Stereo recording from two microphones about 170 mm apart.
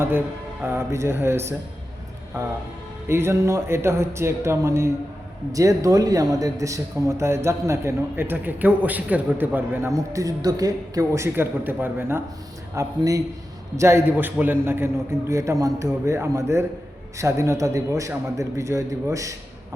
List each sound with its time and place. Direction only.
0.6 s a man's voice: 15° right (ahead or behind)